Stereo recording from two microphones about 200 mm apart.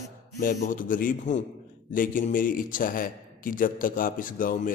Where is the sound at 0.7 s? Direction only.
40° left (ahead or behind).